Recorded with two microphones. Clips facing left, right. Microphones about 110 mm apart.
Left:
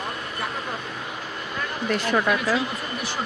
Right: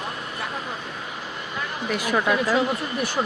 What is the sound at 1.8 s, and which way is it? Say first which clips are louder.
Speech: even; 5° right (ahead or behind).